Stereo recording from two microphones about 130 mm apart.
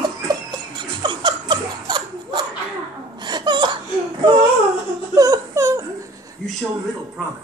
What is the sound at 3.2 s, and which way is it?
Laughter, 35° right (ahead or behind).